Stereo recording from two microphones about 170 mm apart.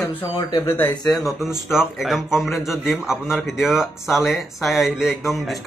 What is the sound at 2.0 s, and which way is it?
A man's voice, centre (ahead or behind).